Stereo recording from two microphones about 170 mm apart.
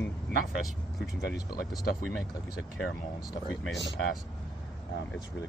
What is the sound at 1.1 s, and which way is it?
Speech, 75° left (ahead or behind).